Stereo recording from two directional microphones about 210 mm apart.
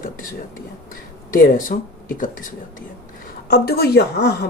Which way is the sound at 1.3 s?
40° left (ahead or behind).